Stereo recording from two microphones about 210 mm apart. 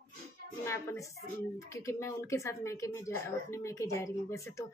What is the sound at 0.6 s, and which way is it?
Speech, 15° left (ahead or behind).